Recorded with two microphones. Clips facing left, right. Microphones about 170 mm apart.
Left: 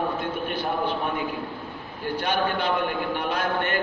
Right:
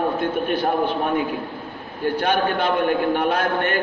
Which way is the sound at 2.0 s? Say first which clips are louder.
Right 5 dB; 60° right (ahead or behind).